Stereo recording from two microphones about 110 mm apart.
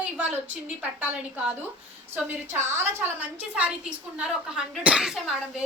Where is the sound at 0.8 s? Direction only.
15° right (ahead or behind).